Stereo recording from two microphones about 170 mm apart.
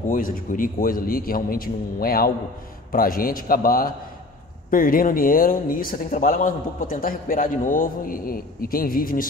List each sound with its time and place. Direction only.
0.1 s speech: 55° left (ahead or behind)